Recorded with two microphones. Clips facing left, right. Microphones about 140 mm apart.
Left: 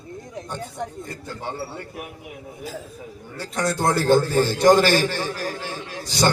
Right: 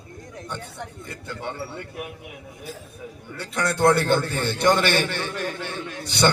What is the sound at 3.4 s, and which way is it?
A man's voice, 60° right (ahead or behind).